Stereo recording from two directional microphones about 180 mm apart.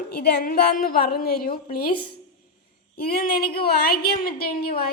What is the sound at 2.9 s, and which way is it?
A woman's voice, 55° left (ahead or behind).